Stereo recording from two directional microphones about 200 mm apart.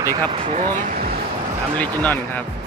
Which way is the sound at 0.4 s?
40° right (ahead or behind).